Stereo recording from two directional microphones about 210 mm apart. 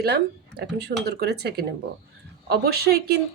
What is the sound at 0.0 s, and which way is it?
Speech, 50° right (ahead or behind).